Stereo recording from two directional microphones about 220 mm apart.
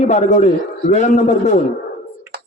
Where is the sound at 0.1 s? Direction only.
30° left (ahead or behind).